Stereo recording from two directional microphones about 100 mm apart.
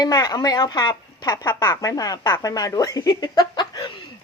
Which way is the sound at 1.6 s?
25° left (ahead or behind).